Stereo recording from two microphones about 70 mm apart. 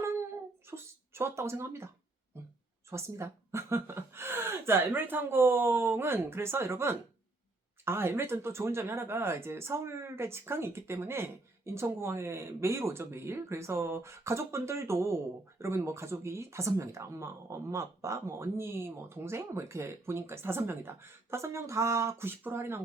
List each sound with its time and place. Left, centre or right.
0.7 s speech: right
2.9 s speech: right
22.3 s speech: right